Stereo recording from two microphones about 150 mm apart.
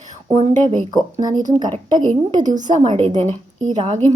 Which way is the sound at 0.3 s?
55° right (ahead or behind).